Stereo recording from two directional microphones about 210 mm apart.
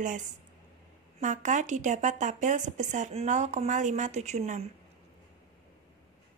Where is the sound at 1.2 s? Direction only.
35° right (ahead or behind).